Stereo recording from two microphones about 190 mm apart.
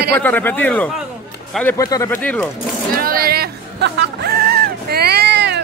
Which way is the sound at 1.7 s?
20° left (ahead or behind).